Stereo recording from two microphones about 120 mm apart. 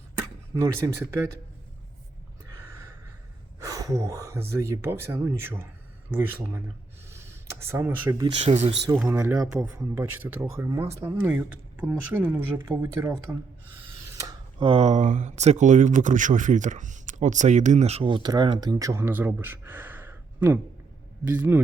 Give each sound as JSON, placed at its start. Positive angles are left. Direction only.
{"t": 0.5, "sound": "speech", "side_deg": -20}
{"t": 2.5, "sound": "a sound", "side_deg": -20}
{"t": 3.6, "sound": "speech", "side_deg": -25}
{"t": 7.1, "sound": "a sound", "side_deg": -20}
{"t": 8.4, "sound": "speech", "side_deg": -60}
{"t": 9.0, "sound": "speech", "side_deg": -25}
{"t": 9.5, "sound": "speech", "side_deg": -10}
{"t": 14.6, "sound": "speech", "side_deg": -50}
{"t": 14.8, "sound": "speech", "side_deg": -90}
{"t": 18.1, "sound": "speech", "side_deg": -35}